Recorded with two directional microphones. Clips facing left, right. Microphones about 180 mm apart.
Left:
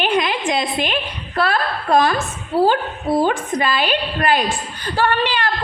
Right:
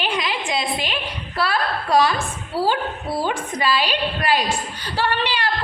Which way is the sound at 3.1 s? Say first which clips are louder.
Left 6 dB; 50° left (ahead or behind).